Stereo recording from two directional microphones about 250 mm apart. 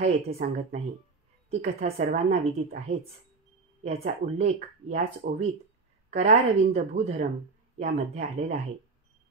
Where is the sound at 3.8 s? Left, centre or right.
Right.